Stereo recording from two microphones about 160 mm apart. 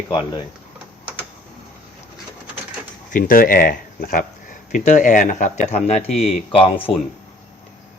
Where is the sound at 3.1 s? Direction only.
60° left (ahead or behind); by 6.9 s 35° left (ahead or behind).